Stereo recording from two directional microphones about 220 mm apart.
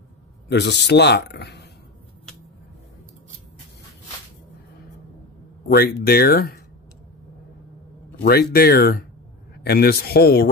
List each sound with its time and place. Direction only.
0.5 s speech: 50° left (ahead or behind)
5.7 s speech: 45° left (ahead or behind)
8.2 s speech: 45° left (ahead or behind)